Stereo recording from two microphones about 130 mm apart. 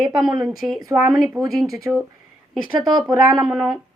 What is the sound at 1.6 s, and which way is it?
Speech, 25° right (ahead or behind).